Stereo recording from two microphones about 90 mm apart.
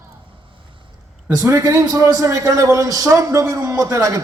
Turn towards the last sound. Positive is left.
turn(degrees=-40)  # may be behind; listen again after turning